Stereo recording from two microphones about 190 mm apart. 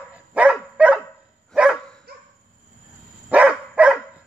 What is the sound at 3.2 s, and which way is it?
Dog, 5° right (ahead or behind).